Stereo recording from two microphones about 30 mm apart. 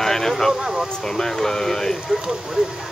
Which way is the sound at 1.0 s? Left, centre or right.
Centre.